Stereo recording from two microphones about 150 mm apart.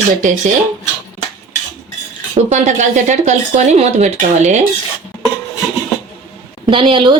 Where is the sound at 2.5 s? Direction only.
55° right (ahead or behind).